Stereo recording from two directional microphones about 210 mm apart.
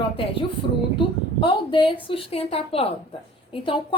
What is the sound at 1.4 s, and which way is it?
A woman's voice, 25° left (ahead or behind).